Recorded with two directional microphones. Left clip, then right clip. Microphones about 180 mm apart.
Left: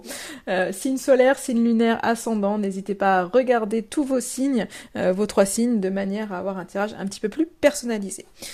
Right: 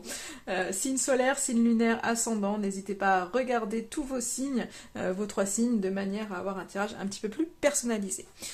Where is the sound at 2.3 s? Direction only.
30° left (ahead or behind).